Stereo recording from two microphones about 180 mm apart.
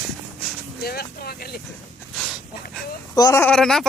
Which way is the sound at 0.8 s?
60° left (ahead or behind).